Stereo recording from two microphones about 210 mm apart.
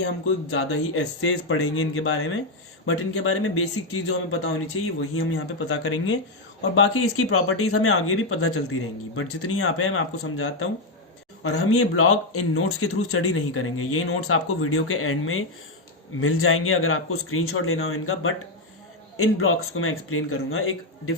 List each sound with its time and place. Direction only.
0.5 s speech: 90° left